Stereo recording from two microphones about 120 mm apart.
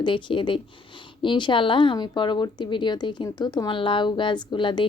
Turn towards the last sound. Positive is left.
turn(degrees=40)  # may be behind; listen again after turning